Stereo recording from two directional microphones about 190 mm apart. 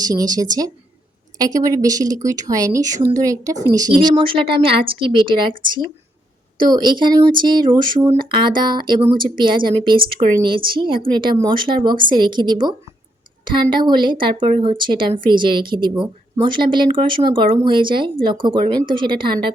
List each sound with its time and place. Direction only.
0.0 s a woman's voice: 20° right (ahead or behind)